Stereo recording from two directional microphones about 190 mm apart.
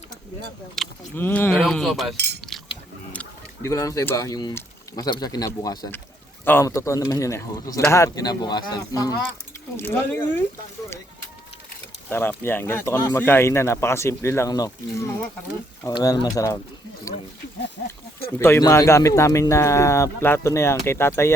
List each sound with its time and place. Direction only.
0.8 s speech: 10° left (ahead or behind)
2.1 s speech: 60° right (ahead or behind)
3.1 s speech: 10° left (ahead or behind)
12.1 s speech: 10° left (ahead or behind)
18.3 s speech: 15° left (ahead or behind)